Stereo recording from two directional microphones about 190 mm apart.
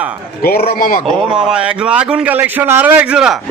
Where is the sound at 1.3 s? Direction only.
5° right (ahead or behind).